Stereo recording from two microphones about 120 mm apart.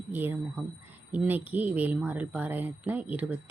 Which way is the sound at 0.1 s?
15° right (ahead or behind).